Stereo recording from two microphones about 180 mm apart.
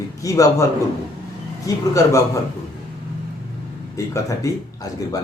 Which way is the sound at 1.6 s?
15° left (ahead or behind).